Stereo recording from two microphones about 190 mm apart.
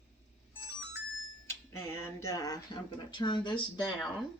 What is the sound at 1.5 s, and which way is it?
Speech, 15° left (ahead or behind).